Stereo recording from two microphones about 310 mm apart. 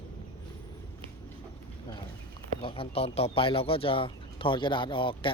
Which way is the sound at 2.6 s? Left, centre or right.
Centre.